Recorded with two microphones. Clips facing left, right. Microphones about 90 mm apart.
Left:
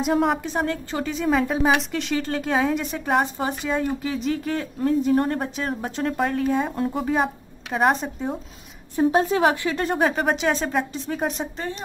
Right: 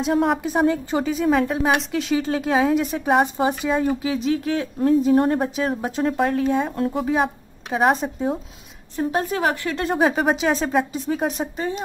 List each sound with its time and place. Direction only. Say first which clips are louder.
0.0 s a woman's voice: right 1 dB; centre (ahead or behind)
0.4 s a woman's voice: right 6 dB; 10° right (ahead or behind)
9.1 s a woman's voice: left 1 dB; 25° left (ahead or behind)
9.7 s a woman's voice: right 2 dB; centre (ahead or behind)